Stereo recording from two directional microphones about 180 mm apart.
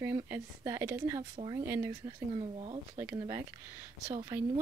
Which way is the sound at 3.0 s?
15° right (ahead or behind).